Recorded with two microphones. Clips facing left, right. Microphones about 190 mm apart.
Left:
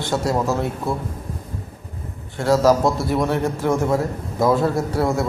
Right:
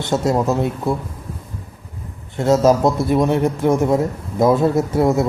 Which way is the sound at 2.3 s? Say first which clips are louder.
Right 2 dB; 20° right (ahead or behind).